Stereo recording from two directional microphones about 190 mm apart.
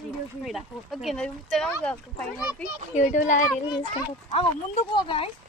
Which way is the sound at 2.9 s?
40° left (ahead or behind).